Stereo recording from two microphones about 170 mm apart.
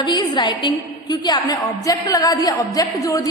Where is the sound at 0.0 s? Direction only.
25° left (ahead or behind).